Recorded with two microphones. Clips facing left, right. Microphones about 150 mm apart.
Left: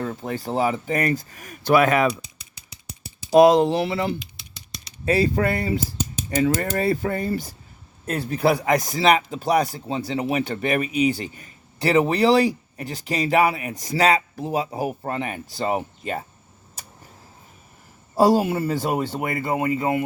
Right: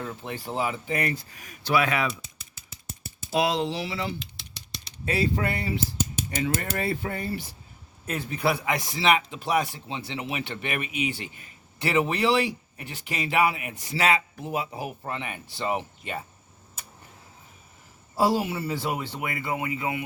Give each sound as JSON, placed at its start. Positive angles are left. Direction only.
{"t": 0.0, "sound": "speech", "side_deg": 40}
{"t": 3.2, "sound": "speech", "side_deg": 45}
{"t": 5.0, "sound": "speech", "side_deg": 40}
{"t": 18.1, "sound": "speech", "side_deg": 45}